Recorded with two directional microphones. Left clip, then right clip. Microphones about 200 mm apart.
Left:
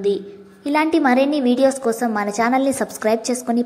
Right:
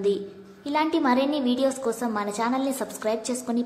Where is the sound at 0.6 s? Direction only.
20° left (ahead or behind).